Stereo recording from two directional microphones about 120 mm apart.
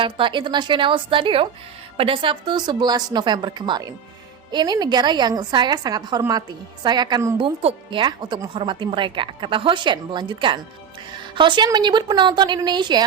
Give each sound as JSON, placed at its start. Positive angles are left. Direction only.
{"t": 0.0, "sound": "a woman's voice", "side_deg": -45}
{"t": 7.3, "sound": "a woman's voice", "side_deg": -50}